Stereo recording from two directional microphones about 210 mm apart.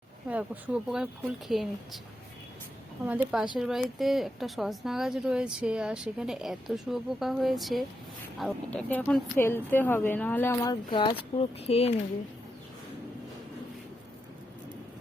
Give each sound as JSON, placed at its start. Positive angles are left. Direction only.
{"t": 0.3, "sound": "speech", "side_deg": -5}
{"t": 3.1, "sound": "speech", "side_deg": -5}